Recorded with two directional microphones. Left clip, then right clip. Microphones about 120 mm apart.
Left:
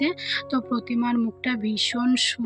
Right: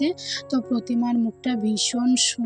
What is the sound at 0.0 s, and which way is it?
Speech, 40° right (ahead or behind).